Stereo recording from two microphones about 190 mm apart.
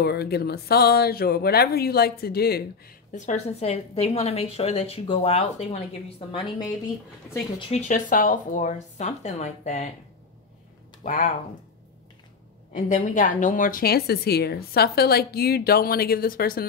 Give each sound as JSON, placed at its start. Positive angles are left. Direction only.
{"t": 0.0, "sound": "speech", "side_deg": 60}
{"t": 3.1, "sound": "a woman's voice", "side_deg": 40}
{"t": 7.5, "sound": "a woman's voice", "side_deg": 35}
{"t": 11.1, "sound": "a woman's voice", "side_deg": 45}
{"t": 12.7, "sound": "a woman's voice", "side_deg": 40}